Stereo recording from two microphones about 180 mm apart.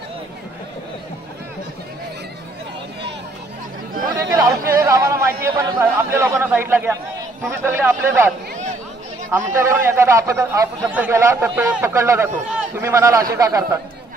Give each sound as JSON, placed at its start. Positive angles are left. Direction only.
{"t": 4.1, "sound": "a man's voice", "side_deg": -20}
{"t": 9.5, "sound": "a man's voice", "side_deg": -15}